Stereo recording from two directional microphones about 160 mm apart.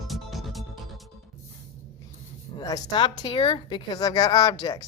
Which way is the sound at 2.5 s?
25° left (ahead or behind).